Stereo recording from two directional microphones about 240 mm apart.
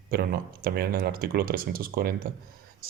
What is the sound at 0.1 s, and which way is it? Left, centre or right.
Speech, right.